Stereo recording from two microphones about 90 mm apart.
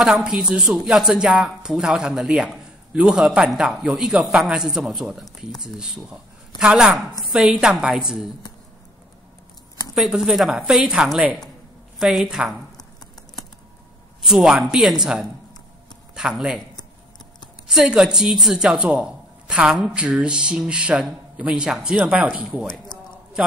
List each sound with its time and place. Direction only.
0.0 s a man's voice: 5° right (ahead or behind)
9.9 s a woman's voice: 5° right (ahead or behind)
14.2 s a woman's voice: 5° right (ahead or behind)
17.6 s a man's voice: 5° right (ahead or behind)
22.9 s a sound: 55° left (ahead or behind)